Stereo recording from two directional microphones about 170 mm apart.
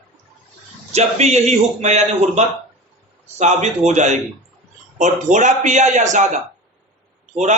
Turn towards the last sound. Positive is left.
turn(degrees=-45)  # may be behind; listen again after turning